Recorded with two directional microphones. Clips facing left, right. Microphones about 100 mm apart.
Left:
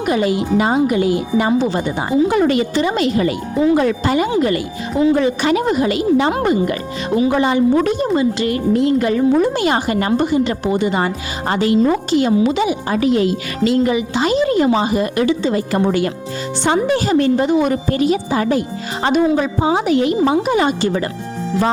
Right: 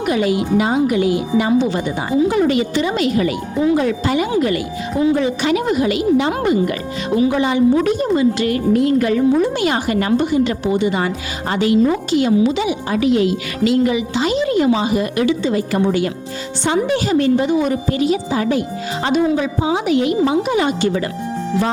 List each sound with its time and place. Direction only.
0.0 s speech: 30° left (ahead or behind)
2.3 s a woman's voice: 50° left (ahead or behind)
2.8 s speech: 30° left (ahead or behind)
3.8 s a woman's voice: 50° left (ahead or behind)
4.3 s speech: 30° left (ahead or behind)
5.1 s speech: 50° left (ahead or behind)
7.9 s speech: 30° left (ahead or behind)
9.4 s speech: 40° left (ahead or behind)
10.7 s speech: 45° left (ahead or behind)
12.4 s a woman's voice: 55° left (ahead or behind)
12.6 s a woman's voice: 35° left (ahead or behind)